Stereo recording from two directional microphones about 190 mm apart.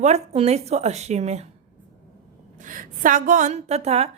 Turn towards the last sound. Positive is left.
turn(degrees=-35)  # may be behind; listen again after turning